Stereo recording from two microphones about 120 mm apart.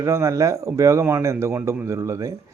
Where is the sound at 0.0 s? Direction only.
25° right (ahead or behind).